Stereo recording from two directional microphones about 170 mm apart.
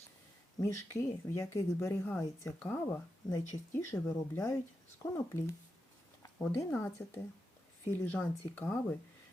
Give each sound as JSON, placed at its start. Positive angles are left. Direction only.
{"t": 0.6, "sound": "speech", "side_deg": 15}